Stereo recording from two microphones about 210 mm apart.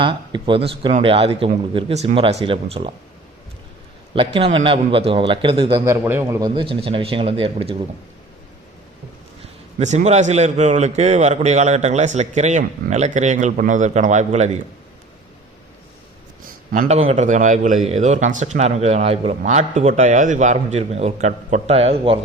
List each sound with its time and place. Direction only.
0.0 s a man's voice: 25° right (ahead or behind)
4.4 s a man's voice: 25° right (ahead or behind)
5.8 s a man's voice: 10° right (ahead or behind); by 7.9 s 25° right (ahead or behind)
9.7 s a man's voice: 35° right (ahead or behind)
16.4 s a man's voice: 40° right (ahead or behind)